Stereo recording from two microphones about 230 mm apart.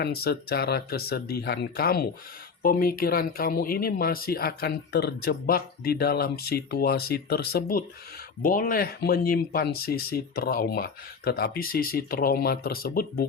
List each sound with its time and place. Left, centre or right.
0.0 s speech: left